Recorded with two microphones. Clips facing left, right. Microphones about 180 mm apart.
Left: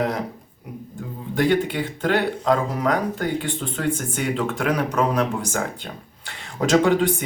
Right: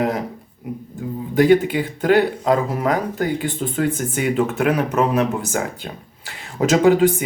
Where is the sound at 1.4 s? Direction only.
5° right (ahead or behind).